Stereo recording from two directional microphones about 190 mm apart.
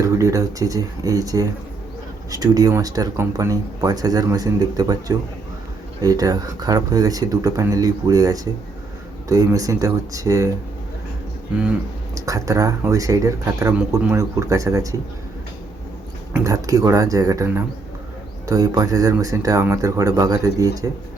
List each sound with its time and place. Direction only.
0.0 s speech: 15° right (ahead or behind)
12.1 s speech: 15° right (ahead or behind)
16.3 s speech: 15° right (ahead or behind)